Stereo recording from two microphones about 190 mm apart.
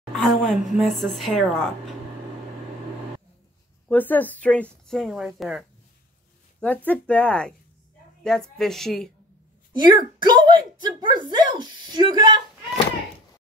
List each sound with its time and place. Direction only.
0.1 s a woman's voice: centre (ahead or behind)
3.9 s a woman's voice: 10° left (ahead or behind)
9.8 s speech: 20° right (ahead or behind)